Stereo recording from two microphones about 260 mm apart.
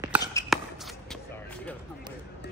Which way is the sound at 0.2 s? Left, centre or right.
Centre.